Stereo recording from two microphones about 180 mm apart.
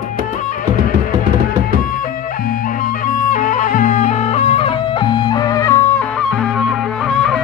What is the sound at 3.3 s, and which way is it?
Music, 45° left (ahead or behind).